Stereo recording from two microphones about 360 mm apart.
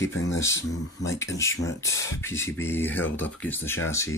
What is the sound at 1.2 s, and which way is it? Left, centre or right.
Speech, centre.